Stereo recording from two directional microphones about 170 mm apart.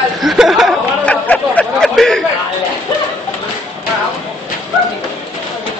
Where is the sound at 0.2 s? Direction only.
Centre (ahead or behind).